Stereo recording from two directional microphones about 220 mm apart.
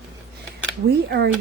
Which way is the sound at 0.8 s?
45° right (ahead or behind).